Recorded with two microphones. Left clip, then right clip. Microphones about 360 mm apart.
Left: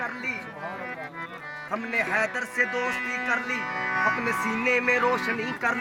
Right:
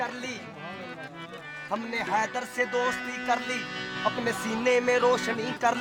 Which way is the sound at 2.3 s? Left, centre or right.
Right.